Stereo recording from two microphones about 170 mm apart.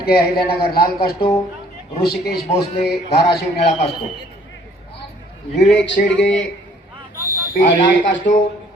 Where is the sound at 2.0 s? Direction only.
70° left (ahead or behind).